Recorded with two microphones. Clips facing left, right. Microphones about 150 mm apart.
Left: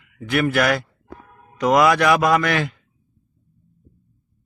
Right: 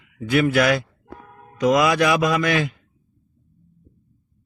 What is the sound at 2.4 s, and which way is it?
Speech, 20° right (ahead or behind).